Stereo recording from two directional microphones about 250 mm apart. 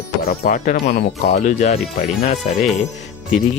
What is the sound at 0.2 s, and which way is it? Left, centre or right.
Speech, left.